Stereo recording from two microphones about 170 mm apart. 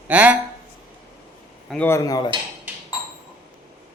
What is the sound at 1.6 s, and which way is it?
Speech, 5° left (ahead or behind).